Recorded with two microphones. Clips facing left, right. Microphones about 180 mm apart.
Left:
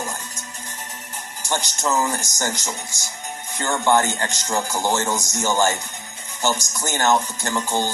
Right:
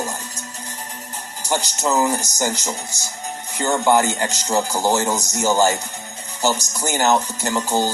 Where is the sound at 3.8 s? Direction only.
10° right (ahead or behind).